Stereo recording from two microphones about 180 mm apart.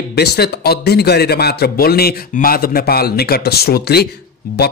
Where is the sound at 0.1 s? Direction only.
60° left (ahead or behind).